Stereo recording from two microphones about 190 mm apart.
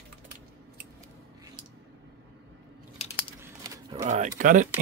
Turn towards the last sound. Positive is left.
turn(degrees=-45)  # may be behind; listen again after turning